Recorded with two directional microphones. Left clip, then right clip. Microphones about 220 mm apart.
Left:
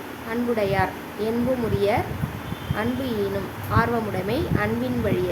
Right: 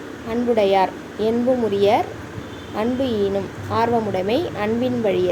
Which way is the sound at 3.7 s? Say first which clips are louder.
Right 4 dB; 10° right (ahead or behind).